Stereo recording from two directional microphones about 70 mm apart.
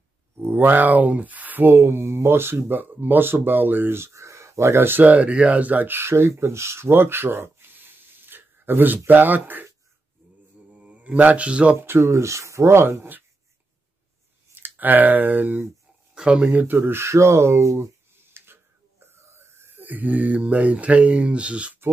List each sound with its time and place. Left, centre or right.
0.4 s speech: right
10.7 s mantra: centre
11.7 s speech: right
14.5 s speech: right
16.2 s speech: centre
16.4 s speech: right
18.2 s a sound: right
19.0 s speech: right; by 21.7 s centre